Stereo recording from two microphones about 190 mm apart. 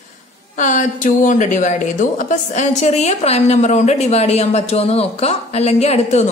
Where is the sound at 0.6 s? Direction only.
40° left (ahead or behind).